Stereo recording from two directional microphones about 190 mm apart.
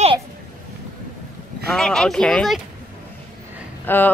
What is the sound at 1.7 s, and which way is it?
Speech, 5° left (ahead or behind).